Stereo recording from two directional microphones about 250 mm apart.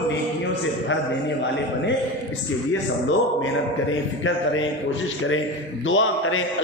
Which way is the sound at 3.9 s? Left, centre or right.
Left.